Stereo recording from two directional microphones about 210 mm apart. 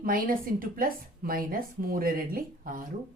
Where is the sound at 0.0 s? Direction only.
40° right (ahead or behind).